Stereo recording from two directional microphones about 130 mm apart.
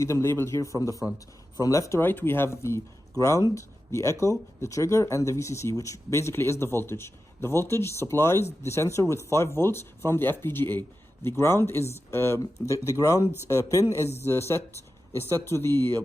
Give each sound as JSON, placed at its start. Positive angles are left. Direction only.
{"t": 0.0, "sound": "speech", "side_deg": 20}